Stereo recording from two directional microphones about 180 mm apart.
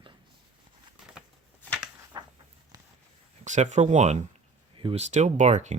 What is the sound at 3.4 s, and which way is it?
Speech, 40° right (ahead or behind).